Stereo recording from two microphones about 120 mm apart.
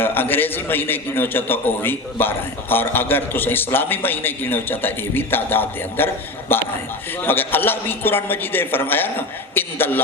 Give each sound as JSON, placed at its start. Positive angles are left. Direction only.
{"t": 0.0, "sound": "a man's voice", "side_deg": 15}